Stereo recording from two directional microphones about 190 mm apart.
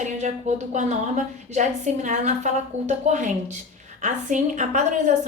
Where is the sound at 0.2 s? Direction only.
40° right (ahead or behind).